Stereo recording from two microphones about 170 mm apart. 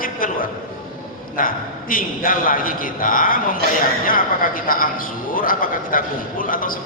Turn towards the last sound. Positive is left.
turn(degrees=55)  # may be behind; listen again after turning